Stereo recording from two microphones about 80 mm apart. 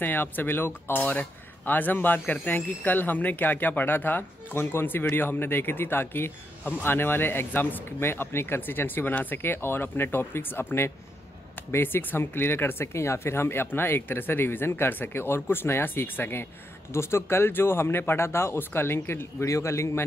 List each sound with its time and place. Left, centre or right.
0.0 s speech: left